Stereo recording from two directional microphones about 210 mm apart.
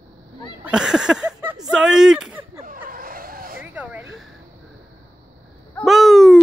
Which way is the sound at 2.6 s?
40° right (ahead or behind).